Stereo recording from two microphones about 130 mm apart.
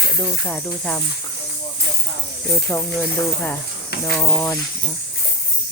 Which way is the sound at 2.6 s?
15° left (ahead or behind).